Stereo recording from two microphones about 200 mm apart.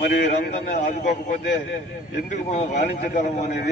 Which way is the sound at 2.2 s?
35° left (ahead or behind).